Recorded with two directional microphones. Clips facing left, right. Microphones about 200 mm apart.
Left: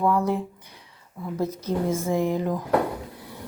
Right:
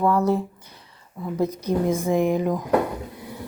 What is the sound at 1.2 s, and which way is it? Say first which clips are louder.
Speech: right 3 dB; 15° right (ahead or behind).